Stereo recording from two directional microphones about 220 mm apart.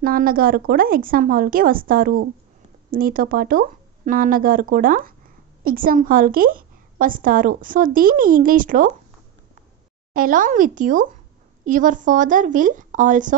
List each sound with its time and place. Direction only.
0.0 s a woman's voice: 40° right (ahead or behind)
10.1 s a woman's voice: 40° right (ahead or behind)